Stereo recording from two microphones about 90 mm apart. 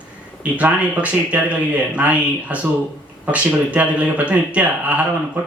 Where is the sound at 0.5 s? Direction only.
15° right (ahead or behind).